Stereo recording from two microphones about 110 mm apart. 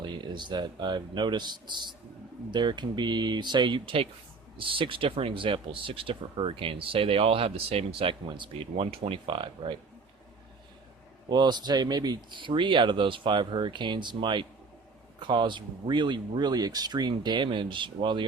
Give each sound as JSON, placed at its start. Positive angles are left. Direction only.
{"t": 0.0, "sound": "speech", "side_deg": -45}
{"t": 11.3, "sound": "speech", "side_deg": -40}